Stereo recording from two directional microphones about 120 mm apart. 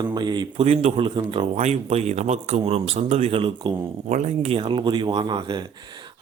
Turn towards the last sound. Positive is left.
turn(degrees=-40)  # may be behind; listen again after turning